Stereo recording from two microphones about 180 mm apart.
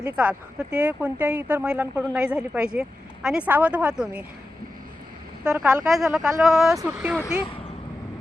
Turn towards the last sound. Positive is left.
turn(degrees=-5)  # may be behind; listen again after turning